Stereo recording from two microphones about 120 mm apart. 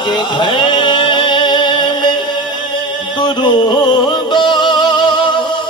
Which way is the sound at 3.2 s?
40° left (ahead or behind).